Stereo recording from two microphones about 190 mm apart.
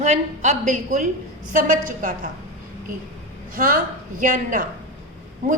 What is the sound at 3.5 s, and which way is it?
A woman's voice, 45° right (ahead or behind).